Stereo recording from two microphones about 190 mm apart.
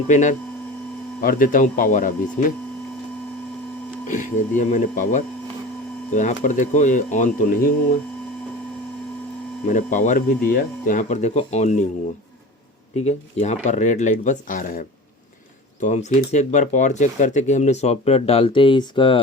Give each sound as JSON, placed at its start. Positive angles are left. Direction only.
{"t": 0.1, "sound": "speech", "side_deg": 40}
{"t": 4.0, "sound": "speech", "side_deg": 40}
{"t": 9.6, "sound": "speech", "side_deg": 40}
{"t": 13.1, "sound": "speech", "side_deg": 35}